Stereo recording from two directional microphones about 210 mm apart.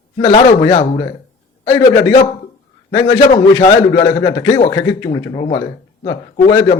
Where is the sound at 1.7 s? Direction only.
15° left (ahead or behind).